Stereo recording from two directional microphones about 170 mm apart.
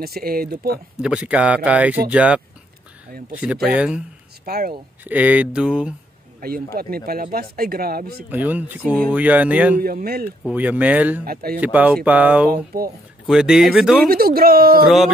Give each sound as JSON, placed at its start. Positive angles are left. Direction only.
{"t": 0.0, "sound": "speech", "side_deg": -60}
{"t": 1.0, "sound": "speech", "side_deg": -5}
{"t": 3.6, "sound": "speech", "side_deg": -5}
{"t": 4.5, "sound": "speech", "side_deg": -65}
{"t": 5.0, "sound": "speech", "side_deg": -10}
{"t": 6.4, "sound": "speech", "side_deg": -65}
{"t": 8.3, "sound": "speech", "side_deg": -10}
{"t": 9.8, "sound": "speech", "side_deg": -60}
{"t": 10.5, "sound": "speech", "side_deg": -10}
{"t": 11.2, "sound": "speech", "side_deg": -60}
{"t": 11.6, "sound": "speech", "side_deg": -10}
{"t": 12.7, "sound": "speech", "side_deg": -65}
{"t": 13.3, "sound": "speech", "side_deg": -5}
{"t": 14.0, "sound": "speech", "side_deg": -60}